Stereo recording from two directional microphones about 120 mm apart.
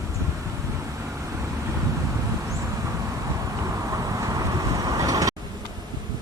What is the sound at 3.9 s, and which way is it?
Vehicle, 30° right (ahead or behind).